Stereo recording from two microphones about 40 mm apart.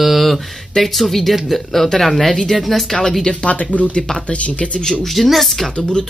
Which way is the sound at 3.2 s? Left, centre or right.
Left.